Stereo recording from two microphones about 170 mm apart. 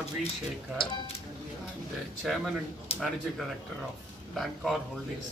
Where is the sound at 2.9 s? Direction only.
35° left (ahead or behind).